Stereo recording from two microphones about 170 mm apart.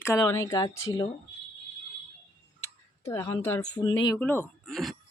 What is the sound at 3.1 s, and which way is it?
Speech, 15° left (ahead or behind).